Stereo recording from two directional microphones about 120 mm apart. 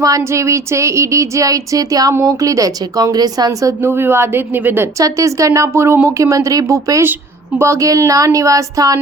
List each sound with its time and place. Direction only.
0.0 s a woman's voice: 25° right (ahead or behind)